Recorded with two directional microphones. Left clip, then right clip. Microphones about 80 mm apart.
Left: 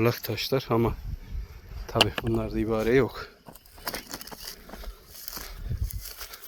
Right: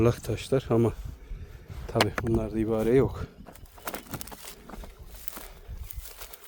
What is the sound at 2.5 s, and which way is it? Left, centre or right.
Speech, right.